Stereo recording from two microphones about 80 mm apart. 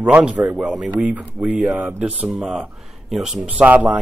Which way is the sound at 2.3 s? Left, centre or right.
Centre.